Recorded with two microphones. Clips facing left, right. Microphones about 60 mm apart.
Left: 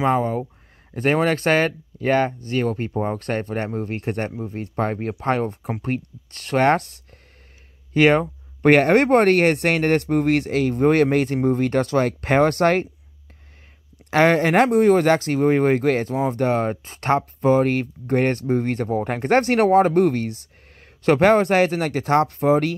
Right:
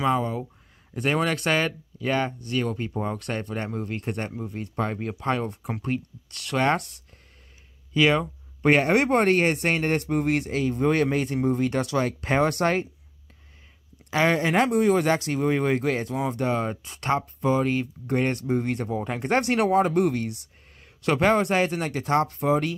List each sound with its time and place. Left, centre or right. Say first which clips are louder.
0.0 s speech: left 4 dB; left
14.1 s speech: left 6 dB; left
16.8 s speech: left 5 dB; left